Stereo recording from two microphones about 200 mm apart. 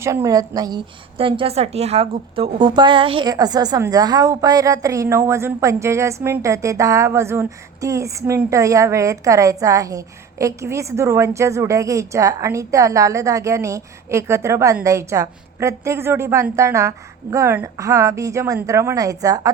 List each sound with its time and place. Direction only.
0.0 s a woman's voice: 15° right (ahead or behind)